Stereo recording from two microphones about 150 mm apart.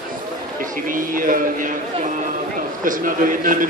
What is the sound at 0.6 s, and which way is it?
Speech, 65° right (ahead or behind).